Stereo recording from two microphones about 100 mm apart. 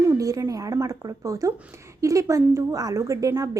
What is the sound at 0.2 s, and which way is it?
Speech, 35° right (ahead or behind).